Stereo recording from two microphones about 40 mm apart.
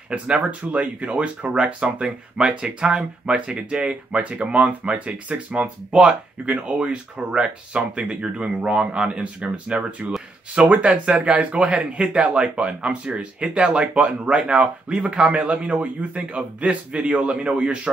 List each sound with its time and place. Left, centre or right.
0.4 s a man's voice: right
1.8 s speech: centre
4.1 s a man's voice: right